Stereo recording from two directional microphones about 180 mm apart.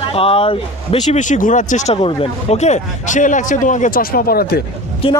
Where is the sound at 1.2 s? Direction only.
45° left (ahead or behind).